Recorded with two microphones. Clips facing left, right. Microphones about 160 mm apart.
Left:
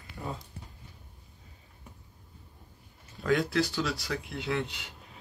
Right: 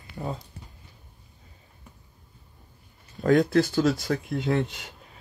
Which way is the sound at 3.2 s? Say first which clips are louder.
Right 7 dB; 45° right (ahead or behind).